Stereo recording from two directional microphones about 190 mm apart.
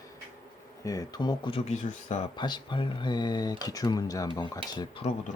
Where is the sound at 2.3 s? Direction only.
25° left (ahead or behind).